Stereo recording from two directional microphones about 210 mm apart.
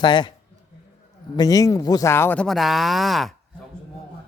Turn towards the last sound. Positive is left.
turn(degrees=0)  # may be behind; listen again after turning